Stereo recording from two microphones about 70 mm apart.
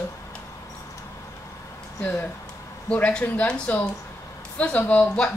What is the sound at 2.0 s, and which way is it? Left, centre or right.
Speech, left.